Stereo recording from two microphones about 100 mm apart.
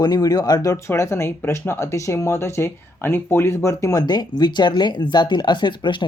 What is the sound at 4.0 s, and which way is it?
Speech, 45° left (ahead or behind).